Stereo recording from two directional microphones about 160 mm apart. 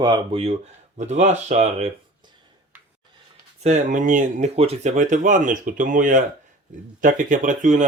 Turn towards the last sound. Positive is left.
turn(degrees=-55)  # may be behind; listen again after turning